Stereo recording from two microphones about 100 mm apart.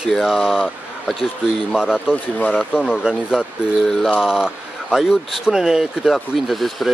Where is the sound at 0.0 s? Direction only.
5° right (ahead or behind).